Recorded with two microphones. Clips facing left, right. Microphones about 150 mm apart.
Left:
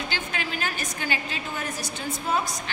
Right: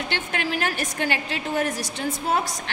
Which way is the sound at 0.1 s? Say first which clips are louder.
Right 4 dB; 70° right (ahead or behind).